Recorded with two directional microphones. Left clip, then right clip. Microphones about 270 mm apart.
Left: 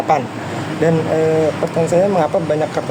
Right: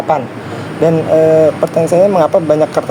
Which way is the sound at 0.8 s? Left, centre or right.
Centre.